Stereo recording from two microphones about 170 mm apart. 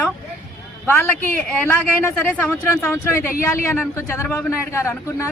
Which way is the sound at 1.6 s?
10° left (ahead or behind).